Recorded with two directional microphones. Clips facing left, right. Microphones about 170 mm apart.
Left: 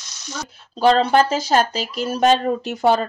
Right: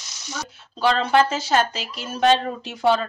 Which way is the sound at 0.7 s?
40° left (ahead or behind).